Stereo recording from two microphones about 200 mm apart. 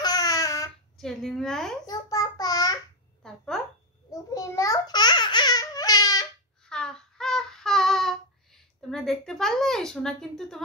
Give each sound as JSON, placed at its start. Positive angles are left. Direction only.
{"t": 0.0, "sound": "babbling", "side_deg": 20}
{"t": 0.9, "sound": "speech", "side_deg": 0}
{"t": 1.9, "sound": "child singing", "side_deg": 20}
{"t": 3.2, "sound": "a sound", "side_deg": 5}
{"t": 4.1, "sound": "babbling", "side_deg": 15}
{"t": 6.7, "sound": "child singing", "side_deg": 5}
{"t": 8.9, "sound": "speech", "side_deg": 0}